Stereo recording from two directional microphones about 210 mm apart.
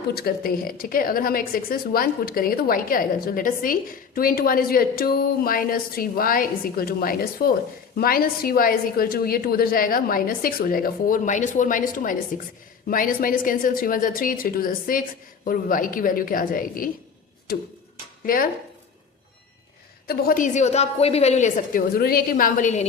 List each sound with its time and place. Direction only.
0.1 s a woman's voice: 45° left (ahead or behind)
20.1 s a woman's voice: 40° left (ahead or behind)